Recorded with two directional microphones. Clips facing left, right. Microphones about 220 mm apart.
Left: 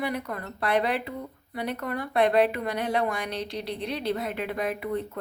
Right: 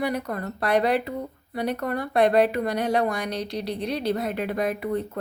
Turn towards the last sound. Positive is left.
turn(degrees=-40)  # may be behind; listen again after turning